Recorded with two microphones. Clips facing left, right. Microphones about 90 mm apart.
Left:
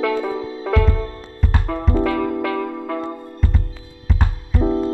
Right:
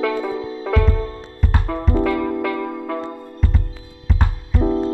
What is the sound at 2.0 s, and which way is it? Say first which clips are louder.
Music: even; 15° left (ahead or behind).